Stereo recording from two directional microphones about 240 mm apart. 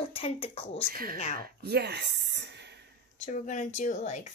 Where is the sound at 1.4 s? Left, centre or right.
Right.